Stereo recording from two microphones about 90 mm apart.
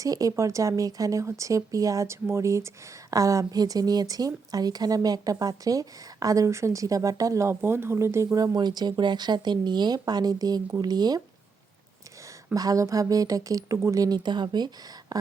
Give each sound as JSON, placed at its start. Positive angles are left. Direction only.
{"t": 0.0, "sound": "speech", "side_deg": -40}
{"t": 8.5, "sound": "speech", "side_deg": -50}
{"t": 12.5, "sound": "speech", "side_deg": -40}